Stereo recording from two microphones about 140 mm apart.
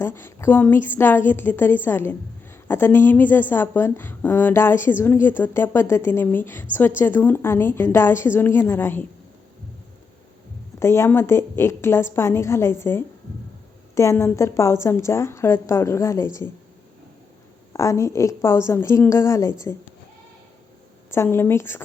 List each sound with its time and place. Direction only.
0.0 s a woman's voice: 15° left (ahead or behind)
10.8 s a woman's voice: 20° left (ahead or behind)
17.7 s a woman's voice: 20° left (ahead or behind)
21.1 s a woman's voice: 20° left (ahead or behind)